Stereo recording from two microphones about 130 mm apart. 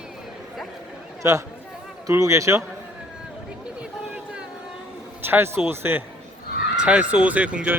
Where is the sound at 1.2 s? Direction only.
20° right (ahead or behind).